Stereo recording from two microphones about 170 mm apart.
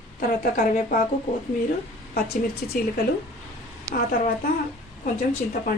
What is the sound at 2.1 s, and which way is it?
Speech, 70° left (ahead or behind).